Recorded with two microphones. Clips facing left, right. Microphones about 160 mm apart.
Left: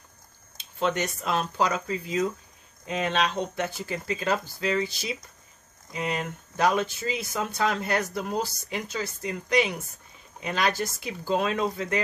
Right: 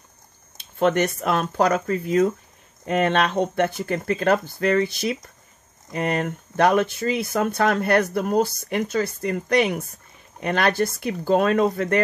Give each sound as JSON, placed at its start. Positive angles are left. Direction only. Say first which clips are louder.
{"t": 0.6, "sound": "speech", "louder": "right 7 dB", "side_deg": -55}